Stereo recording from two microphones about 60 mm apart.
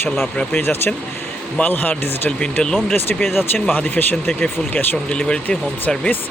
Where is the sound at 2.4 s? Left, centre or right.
Centre.